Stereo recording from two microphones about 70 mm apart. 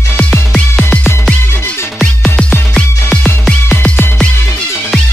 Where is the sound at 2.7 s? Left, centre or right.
Centre.